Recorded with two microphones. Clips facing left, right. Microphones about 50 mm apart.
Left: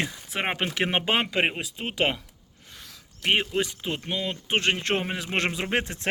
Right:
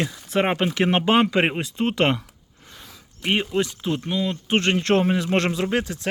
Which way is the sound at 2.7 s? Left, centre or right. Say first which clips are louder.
Right 2 dB; centre.